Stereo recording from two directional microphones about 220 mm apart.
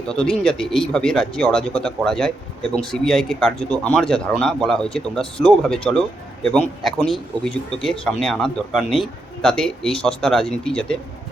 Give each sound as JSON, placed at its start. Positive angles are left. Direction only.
{"t": 0.1, "sound": "speech", "side_deg": 5}